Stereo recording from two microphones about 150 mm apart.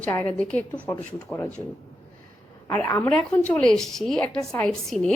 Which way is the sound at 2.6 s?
20° left (ahead or behind).